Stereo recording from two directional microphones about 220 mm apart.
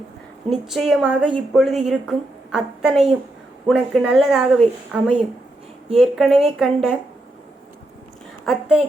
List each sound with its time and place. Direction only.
0.5 s a woman's voice: centre (ahead or behind)
8.4 s a woman's voice: 5° right (ahead or behind)